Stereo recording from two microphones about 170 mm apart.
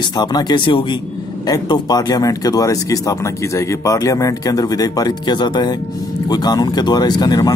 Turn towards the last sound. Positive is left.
turn(degrees=20)  # may be behind; listen again after turning